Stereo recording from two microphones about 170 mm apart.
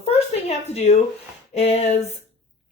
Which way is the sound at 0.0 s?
40° left (ahead or behind).